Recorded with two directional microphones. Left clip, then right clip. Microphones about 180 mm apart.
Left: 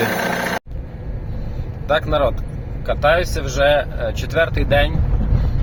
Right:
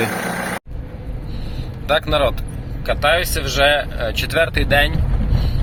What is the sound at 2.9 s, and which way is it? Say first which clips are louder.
Speech: even; 25° left (ahead or behind).